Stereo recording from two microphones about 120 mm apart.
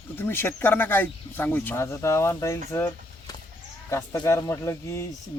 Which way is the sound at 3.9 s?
25° left (ahead or behind).